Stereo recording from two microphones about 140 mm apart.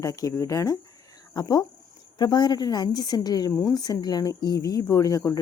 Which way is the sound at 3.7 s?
30° left (ahead or behind).